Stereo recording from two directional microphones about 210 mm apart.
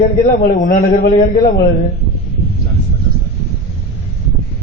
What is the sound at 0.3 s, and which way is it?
A man's voice, 40° left (ahead or behind).